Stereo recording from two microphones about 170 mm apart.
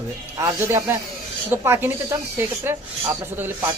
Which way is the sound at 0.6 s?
15° right (ahead or behind).